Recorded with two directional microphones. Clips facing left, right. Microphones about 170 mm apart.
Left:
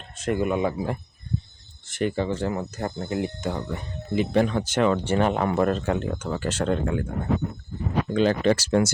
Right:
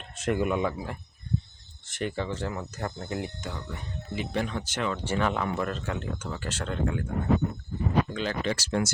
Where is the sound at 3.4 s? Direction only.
50° left (ahead or behind).